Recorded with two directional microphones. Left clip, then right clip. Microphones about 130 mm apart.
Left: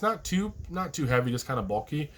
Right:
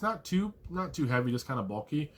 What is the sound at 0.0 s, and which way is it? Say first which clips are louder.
Speech: left 4 dB; 30° left (ahead or behind).